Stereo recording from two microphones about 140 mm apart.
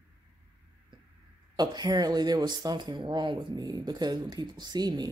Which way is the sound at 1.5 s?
30° right (ahead or behind).